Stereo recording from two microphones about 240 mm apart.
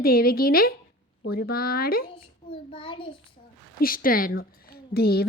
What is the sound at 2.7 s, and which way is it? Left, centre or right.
Speech, left.